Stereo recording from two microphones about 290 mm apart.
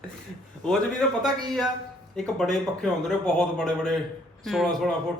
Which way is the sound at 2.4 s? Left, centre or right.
Centre.